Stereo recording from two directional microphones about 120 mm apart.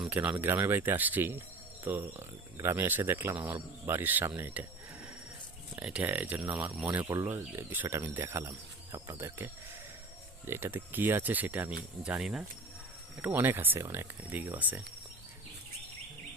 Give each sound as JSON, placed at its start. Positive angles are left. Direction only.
{"t": 0.0, "sound": "speech", "side_deg": -10}
{"t": 5.7, "sound": "speech", "side_deg": -10}
{"t": 7.1, "sound": "speech", "side_deg": -25}
{"t": 10.4, "sound": "speech", "side_deg": -20}
{"t": 13.2, "sound": "speech", "side_deg": -15}